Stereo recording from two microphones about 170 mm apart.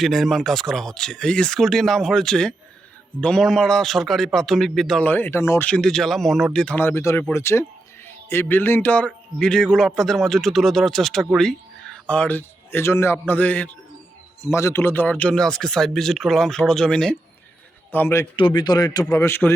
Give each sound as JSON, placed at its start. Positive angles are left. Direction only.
{"t": 0.0, "sound": "a man's voice", "side_deg": 0}
{"t": 18.3, "sound": "speech", "side_deg": 30}